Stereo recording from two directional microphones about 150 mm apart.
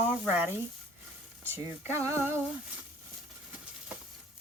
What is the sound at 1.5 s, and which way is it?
Speech, 15° right (ahead or behind).